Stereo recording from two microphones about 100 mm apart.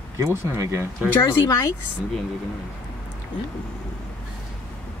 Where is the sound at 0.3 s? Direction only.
25° right (ahead or behind).